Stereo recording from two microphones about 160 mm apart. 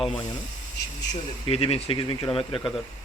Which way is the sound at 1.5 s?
35° left (ahead or behind).